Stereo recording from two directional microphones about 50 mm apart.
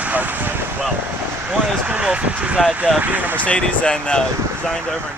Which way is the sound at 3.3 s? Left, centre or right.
Left.